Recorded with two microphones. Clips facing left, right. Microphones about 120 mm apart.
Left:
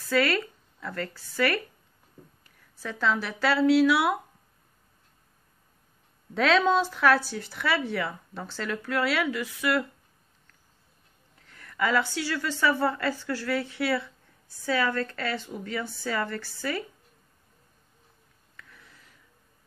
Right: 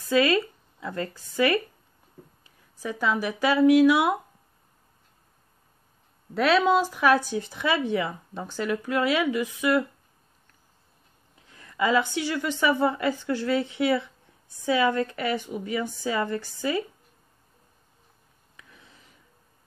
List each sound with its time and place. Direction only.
0.1 s speech: 15° right (ahead or behind)
6.3 s a woman's voice: 5° right (ahead or behind)
11.3 s a woman's voice: 15° right (ahead or behind)
18.6 s a sound: 20° right (ahead or behind)